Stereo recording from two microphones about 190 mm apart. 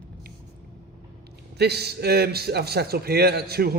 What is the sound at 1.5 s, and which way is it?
A man's voice, 60° right (ahead or behind).